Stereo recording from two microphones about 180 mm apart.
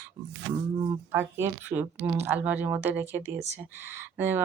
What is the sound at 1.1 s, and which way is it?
Speech, 15° right (ahead or behind).